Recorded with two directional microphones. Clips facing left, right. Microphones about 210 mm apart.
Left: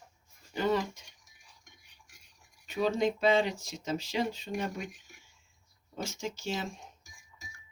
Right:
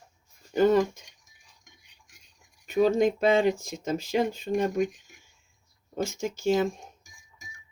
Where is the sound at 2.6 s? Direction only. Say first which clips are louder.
Right 7 dB; 50° right (ahead or behind).